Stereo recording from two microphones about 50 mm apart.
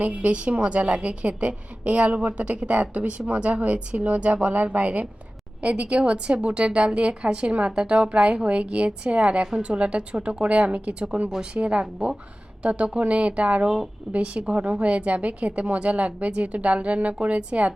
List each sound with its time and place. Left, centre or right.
0.0 s a woman's voice: right